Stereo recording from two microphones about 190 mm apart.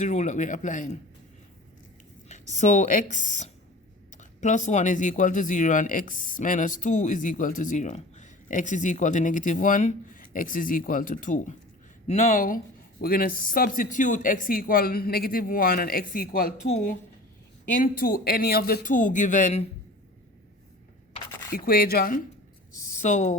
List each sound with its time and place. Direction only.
0.0 s speech: 40° left (ahead or behind)
2.3 s speech: 40° left (ahead or behind)
16.6 s speech: 40° left (ahead or behind)
17.7 s speech: 50° left (ahead or behind)
21.5 s speech: 50° left (ahead or behind)
22.7 s a woman's voice: 40° left (ahead or behind)